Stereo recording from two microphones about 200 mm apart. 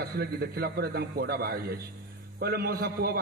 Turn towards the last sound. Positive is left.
turn(degrees=-50)  # may be behind; listen again after turning